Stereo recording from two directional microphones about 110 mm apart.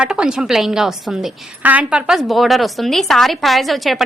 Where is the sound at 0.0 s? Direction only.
10° right (ahead or behind).